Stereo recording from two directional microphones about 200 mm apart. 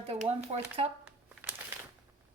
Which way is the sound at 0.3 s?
30° right (ahead or behind).